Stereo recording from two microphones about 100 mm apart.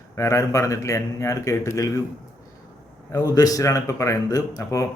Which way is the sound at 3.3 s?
35° left (ahead or behind).